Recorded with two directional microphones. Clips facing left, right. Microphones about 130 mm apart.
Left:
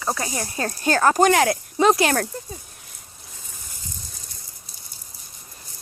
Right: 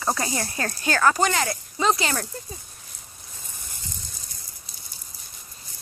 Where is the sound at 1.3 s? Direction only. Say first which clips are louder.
Left 8 dB; 60° left (ahead or behind).